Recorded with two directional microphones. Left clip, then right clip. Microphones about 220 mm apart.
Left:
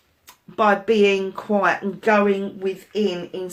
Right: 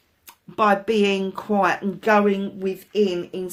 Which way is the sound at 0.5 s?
45° right (ahead or behind).